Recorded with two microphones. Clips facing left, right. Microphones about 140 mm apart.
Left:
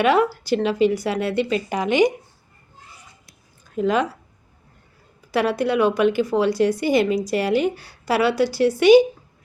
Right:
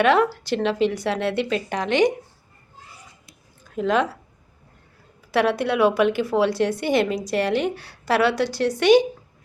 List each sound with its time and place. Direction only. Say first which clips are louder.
0.0 s a woman's voice: even; centre (ahead or behind)
3.7 s speech: left 1 dB; centre (ahead or behind)
5.3 s a woman's voice: even; centre (ahead or behind)